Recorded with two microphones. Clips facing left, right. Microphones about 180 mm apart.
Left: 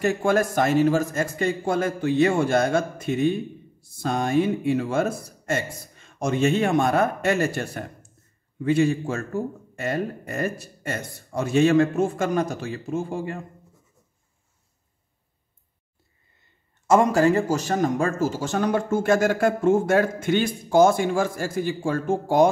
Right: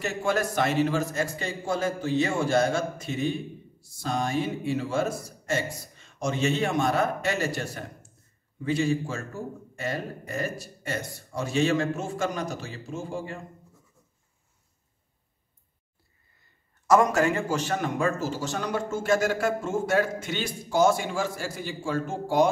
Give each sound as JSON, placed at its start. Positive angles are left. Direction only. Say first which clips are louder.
{"t": 0.0, "sound": "a man's voice", "louder": "left 6 dB", "side_deg": 50}
{"t": 16.8, "sound": "speech", "louder": "left 3 dB", "side_deg": 30}